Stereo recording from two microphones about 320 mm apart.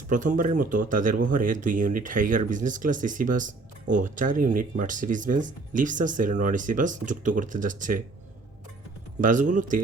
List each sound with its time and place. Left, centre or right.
0.1 s speech: right
9.2 s speech: right